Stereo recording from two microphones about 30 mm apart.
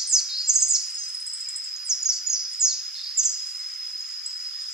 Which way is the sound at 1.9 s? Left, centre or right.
Centre.